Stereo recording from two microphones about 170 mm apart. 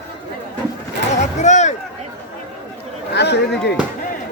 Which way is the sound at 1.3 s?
45° left (ahead or behind).